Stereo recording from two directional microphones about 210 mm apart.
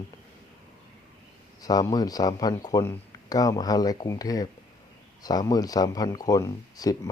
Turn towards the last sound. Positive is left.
turn(degrees=15)  # may be behind; listen again after turning